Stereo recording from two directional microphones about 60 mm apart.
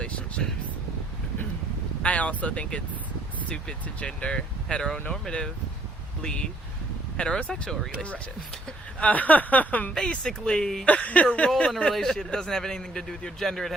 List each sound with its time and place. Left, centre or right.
0.0 s a sound: centre
2.0 s a man's voice: left
6.2 s a man's voice: centre
9.0 s speech: left
9.9 s a man's voice: centre
10.8 s speech: left
11.4 s a man's voice: centre